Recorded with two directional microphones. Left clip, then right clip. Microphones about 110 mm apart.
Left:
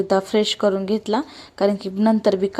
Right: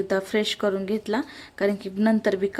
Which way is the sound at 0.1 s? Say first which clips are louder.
Left 6 dB; 25° left (ahead or behind).